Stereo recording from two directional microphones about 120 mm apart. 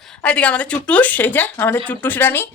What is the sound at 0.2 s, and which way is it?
Speech, 10° left (ahead or behind).